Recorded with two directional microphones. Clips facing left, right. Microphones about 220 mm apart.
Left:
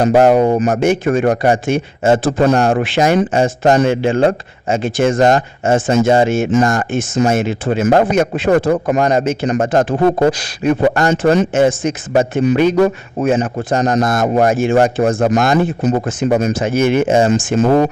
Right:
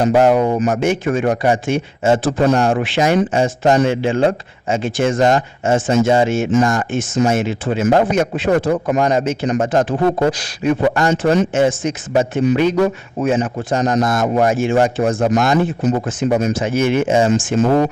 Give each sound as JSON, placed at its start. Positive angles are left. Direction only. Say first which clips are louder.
{"t": 0.1, "sound": "a man's voice", "louder": "left 4 dB", "side_deg": 40}
{"t": 11.1, "sound": "a man's voice", "louder": "left 2 dB", "side_deg": 55}